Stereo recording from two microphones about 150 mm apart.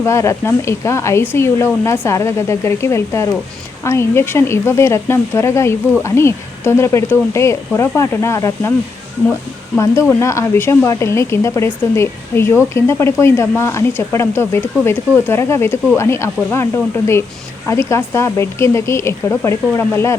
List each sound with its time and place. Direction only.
0.0 s speech: 20° left (ahead or behind)
9.7 s speech: 20° left (ahead or behind)
17.7 s speech: 20° left (ahead or behind)